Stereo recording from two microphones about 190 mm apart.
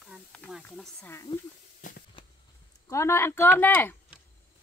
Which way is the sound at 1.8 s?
45° left (ahead or behind).